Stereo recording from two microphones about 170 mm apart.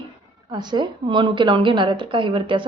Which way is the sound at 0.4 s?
25° right (ahead or behind).